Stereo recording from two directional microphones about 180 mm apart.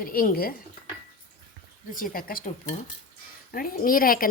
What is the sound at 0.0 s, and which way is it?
Speech, 55° left (ahead or behind).